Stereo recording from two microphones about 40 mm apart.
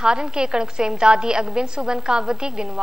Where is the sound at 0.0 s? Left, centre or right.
Centre.